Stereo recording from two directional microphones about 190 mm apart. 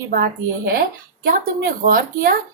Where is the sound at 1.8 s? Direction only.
45° right (ahead or behind).